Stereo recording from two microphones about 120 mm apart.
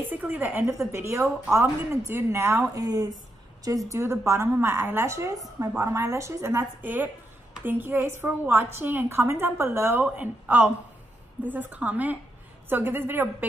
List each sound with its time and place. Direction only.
0.0 s a woman's voice: 15° right (ahead or behind)